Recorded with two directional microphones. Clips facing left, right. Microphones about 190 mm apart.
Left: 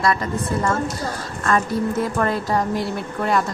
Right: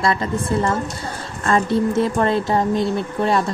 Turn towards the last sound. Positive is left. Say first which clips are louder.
# right 2 dB
turn(degrees=-25)  # may be behind; listen again after turning